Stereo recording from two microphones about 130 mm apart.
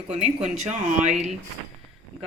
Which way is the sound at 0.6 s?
60° right (ahead or behind).